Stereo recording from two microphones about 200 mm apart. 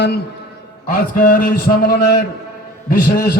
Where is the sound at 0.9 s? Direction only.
45° left (ahead or behind).